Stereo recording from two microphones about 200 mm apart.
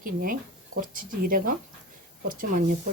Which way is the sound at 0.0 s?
45° right (ahead or behind).